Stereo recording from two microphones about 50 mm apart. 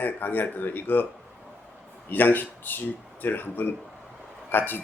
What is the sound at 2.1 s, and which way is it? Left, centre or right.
Speech, left.